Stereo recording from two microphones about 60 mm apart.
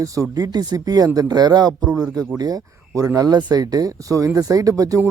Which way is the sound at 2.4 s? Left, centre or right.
Right.